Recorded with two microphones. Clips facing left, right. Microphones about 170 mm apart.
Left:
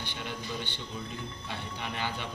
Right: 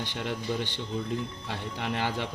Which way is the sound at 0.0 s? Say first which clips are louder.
Right 6 dB; 90° right.